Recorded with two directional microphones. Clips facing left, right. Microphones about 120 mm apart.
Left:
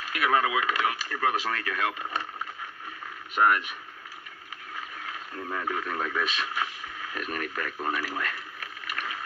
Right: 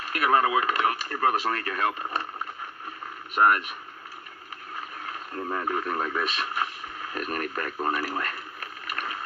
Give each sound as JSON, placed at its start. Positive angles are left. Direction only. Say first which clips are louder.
{"t": 0.1, "sound": "speech", "louder": "right 3 dB", "side_deg": -40}
{"t": 4.7, "sound": "speech", "louder": "right 2 dB", "side_deg": -40}
{"t": 7.7, "sound": "a sound", "louder": "right 4 dB", "side_deg": -40}